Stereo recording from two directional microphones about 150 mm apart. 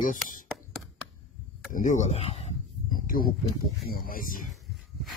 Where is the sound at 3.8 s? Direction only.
70° left (ahead or behind).